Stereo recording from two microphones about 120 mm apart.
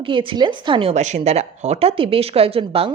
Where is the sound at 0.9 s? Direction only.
70° right (ahead or behind); by 2.9 s 50° right (ahead or behind).